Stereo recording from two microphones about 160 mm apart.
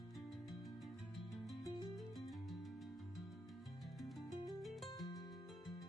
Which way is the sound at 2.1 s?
Centre (ahead or behind).